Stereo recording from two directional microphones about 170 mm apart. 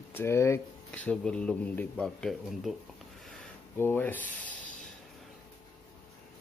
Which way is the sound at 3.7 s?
10° left (ahead or behind).